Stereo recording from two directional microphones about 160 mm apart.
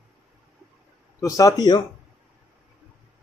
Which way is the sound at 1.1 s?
20° left (ahead or behind).